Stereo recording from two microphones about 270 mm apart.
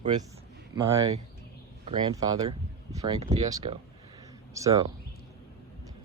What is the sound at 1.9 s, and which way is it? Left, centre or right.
Speech, centre.